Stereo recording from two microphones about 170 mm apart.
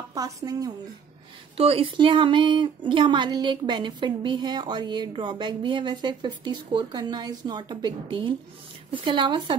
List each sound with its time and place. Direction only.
0.1 s speech: 20° right (ahead or behind)
1.6 s speech: 35° right (ahead or behind)